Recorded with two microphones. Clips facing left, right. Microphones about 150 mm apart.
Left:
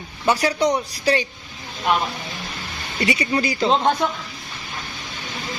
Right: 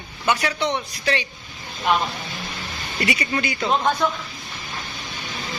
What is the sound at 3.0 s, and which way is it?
Speech, 30° left (ahead or behind).